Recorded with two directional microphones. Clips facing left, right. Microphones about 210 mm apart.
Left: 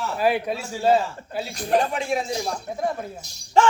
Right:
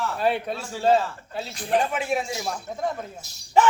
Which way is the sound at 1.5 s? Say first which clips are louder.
Left 2 dB; 40° left (ahead or behind).